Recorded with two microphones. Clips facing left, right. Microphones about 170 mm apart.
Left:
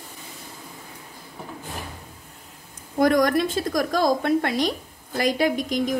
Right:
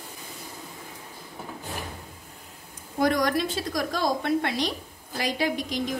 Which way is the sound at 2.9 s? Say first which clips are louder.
Left 5 dB; 50° left (ahead or behind).